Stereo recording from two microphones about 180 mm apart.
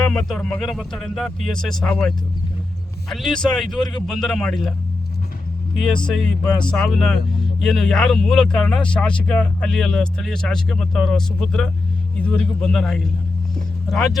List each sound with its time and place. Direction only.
0.1 s speech: 5° left (ahead or behind)
5.9 s speech: 5° left (ahead or behind)